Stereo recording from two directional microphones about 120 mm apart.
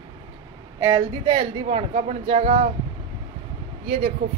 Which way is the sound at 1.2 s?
35° right (ahead or behind).